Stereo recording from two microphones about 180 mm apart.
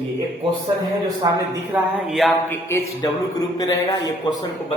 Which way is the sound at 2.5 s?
15° left (ahead or behind).